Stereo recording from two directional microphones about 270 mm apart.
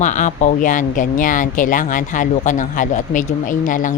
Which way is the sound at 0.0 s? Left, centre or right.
Left.